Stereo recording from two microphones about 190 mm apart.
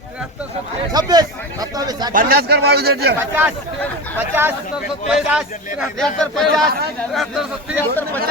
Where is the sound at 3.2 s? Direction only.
10° right (ahead or behind).